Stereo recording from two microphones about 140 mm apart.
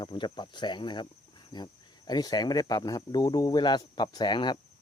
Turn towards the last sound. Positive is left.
turn(degrees=35)  # may be behind; listen again after turning